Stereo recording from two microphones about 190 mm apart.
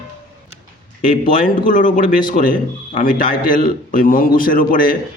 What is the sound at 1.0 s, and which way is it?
A man's voice, 45° left (ahead or behind).